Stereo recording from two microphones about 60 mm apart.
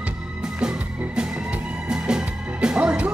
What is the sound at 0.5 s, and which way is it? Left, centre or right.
Music, centre.